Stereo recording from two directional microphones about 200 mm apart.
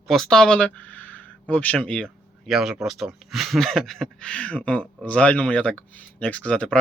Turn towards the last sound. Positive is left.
turn(degrees=5)  # may be behind; listen again after turning